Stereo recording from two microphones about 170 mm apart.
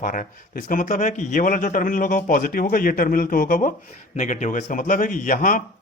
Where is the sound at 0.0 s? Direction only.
50° left (ahead or behind).